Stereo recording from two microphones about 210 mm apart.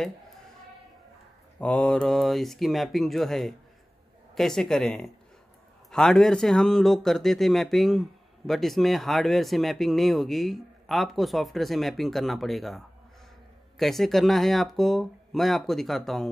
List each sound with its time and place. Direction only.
1.6 s speech: 5° left (ahead or behind)